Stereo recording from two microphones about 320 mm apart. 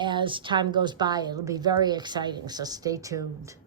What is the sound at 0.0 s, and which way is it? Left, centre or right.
A woman's voice, centre.